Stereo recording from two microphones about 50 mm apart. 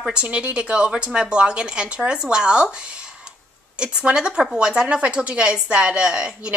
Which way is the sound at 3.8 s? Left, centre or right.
Centre.